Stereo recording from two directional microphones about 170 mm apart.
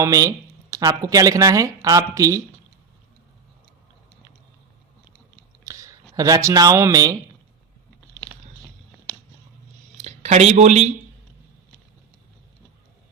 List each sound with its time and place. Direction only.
0.0 s speech: 20° right (ahead or behind)
5.6 s speech: 20° right (ahead or behind)
10.0 s speech: 45° right (ahead or behind)